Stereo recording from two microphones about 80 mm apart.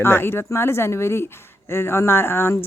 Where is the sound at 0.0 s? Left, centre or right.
Left.